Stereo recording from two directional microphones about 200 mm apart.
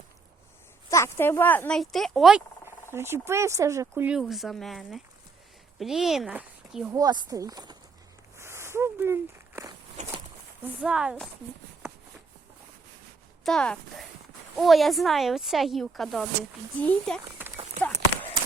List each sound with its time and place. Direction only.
0.9 s speech: 15° left (ahead or behind)
2.9 s speech: 10° right (ahead or behind)
6.9 s speech: 20° right (ahead or behind)
8.4 s walk: 15° right (ahead or behind)
10.6 s speech: 5° right (ahead or behind)
13.4 s speech: 5° left (ahead or behind)
17.7 s clip-clop: 10° left (ahead or behind)